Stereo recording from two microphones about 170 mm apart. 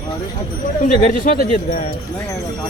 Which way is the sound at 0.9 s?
50° left (ahead or behind).